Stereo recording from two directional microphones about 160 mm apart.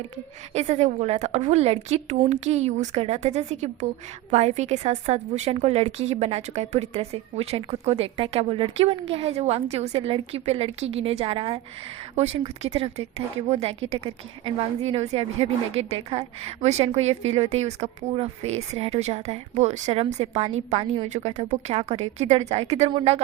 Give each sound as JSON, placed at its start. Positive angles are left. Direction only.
{"t": 0.5, "sound": "a woman's voice", "side_deg": -40}